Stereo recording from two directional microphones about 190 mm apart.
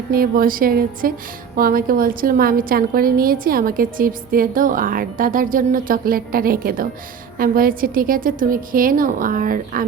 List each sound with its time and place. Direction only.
0.1 s a woman's voice: 50° right (ahead or behind)